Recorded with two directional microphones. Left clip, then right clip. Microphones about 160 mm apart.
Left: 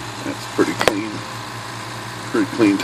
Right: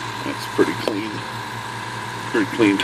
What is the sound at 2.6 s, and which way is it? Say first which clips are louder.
Speech: left 1 dB; 20° left (ahead or behind).